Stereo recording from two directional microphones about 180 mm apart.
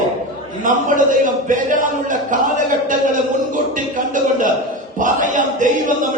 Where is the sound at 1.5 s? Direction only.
45° right (ahead or behind).